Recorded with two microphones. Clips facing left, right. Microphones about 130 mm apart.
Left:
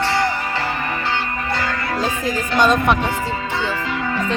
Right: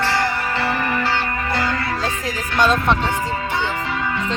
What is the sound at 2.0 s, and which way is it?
Music, centre (ahead or behind).